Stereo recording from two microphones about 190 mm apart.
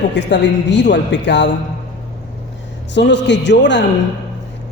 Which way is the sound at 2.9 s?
65° left (ahead or behind).